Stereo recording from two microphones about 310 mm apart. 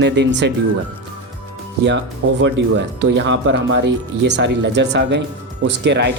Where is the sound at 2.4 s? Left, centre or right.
Right.